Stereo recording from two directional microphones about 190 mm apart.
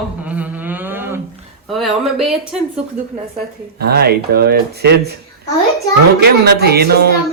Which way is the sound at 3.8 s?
55° right (ahead or behind).